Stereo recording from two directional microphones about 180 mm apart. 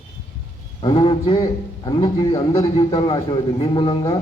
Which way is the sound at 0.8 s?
30° left (ahead or behind).